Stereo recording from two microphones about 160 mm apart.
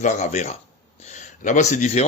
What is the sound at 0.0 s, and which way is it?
Speech, 50° left (ahead or behind).